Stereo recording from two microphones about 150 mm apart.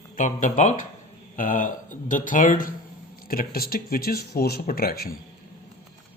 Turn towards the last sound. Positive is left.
turn(degrees=90)